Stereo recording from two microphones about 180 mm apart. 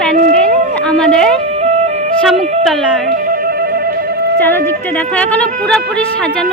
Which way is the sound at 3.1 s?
50° right (ahead or behind).